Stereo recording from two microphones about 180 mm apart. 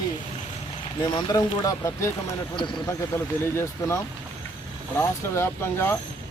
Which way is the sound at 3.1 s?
15° left (ahead or behind).